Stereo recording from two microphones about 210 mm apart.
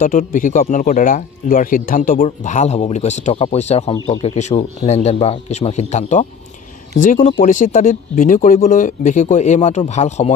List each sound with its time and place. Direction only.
0.0 s speech: 40° left (ahead or behind)
3.9 s speech: 20° left (ahead or behind)
4.4 s speech: 35° left (ahead or behind)